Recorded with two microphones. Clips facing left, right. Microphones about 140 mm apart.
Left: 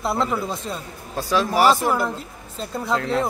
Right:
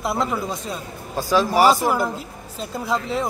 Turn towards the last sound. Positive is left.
turn(degrees=0)  # may be behind; listen again after turning